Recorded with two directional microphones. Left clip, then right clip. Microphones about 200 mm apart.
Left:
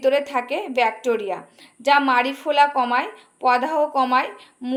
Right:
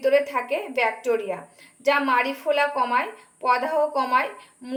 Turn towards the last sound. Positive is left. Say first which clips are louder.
# left 2 dB
turn(degrees=45)  # may be behind; listen again after turning